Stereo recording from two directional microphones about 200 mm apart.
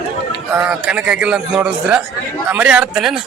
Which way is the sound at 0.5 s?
5° right (ahead or behind).